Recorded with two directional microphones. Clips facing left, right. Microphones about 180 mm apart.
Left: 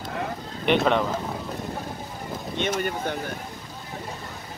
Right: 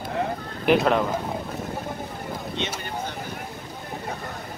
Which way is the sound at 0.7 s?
5° right (ahead or behind).